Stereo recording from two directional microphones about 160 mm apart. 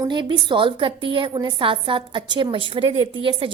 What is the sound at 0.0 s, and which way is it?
A woman's voice, 30° right (ahead or behind).